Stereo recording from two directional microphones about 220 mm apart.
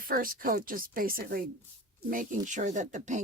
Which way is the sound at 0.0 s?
40° right (ahead or behind).